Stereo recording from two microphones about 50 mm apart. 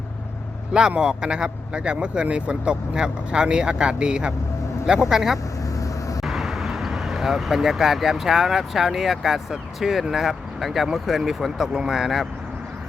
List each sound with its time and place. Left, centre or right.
0.7 s speech: centre
5.7 s vehicle: left
6.2 s speech: centre